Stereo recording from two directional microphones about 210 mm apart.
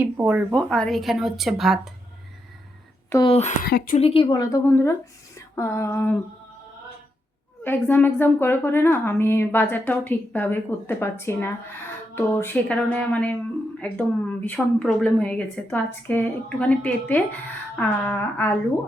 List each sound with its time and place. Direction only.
0.0 s a woman's voice: 5° right (ahead or behind)
3.2 s speech: 30° left (ahead or behind)
3.7 s a woman's voice: 50° left (ahead or behind)
3.9 s a woman's voice: 25° left (ahead or behind); by 6.1 s 10° left (ahead or behind)
7.6 s a woman's voice: 10° left (ahead or behind)